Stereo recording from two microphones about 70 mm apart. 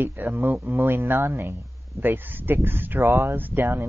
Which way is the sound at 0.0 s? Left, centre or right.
Right.